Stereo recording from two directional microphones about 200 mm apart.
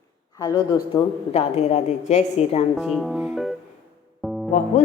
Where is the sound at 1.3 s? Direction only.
35° left (ahead or behind).